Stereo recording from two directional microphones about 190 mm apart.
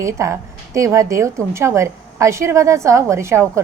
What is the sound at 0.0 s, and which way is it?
A woman's voice, 15° right (ahead or behind).